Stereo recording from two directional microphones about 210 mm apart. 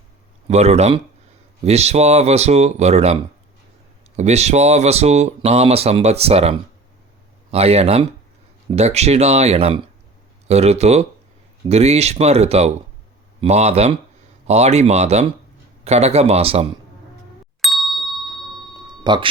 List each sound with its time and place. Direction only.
0.4 s speech: 30° right (ahead or behind)
4.2 s speech: 30° right (ahead or behind)
17.6 s ding: centre (ahead or behind)
18.9 s music: 20° right (ahead or behind)